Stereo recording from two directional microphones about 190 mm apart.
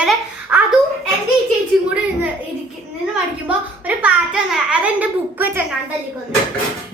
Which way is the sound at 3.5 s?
5° right (ahead or behind).